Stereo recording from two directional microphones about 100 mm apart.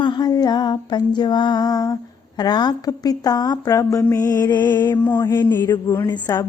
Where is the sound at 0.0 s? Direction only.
45° left (ahead or behind).